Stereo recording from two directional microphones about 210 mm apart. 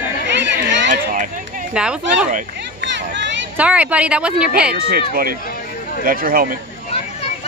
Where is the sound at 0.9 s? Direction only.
40° right (ahead or behind).